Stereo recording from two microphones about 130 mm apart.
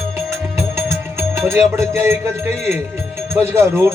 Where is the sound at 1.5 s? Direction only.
20° right (ahead or behind).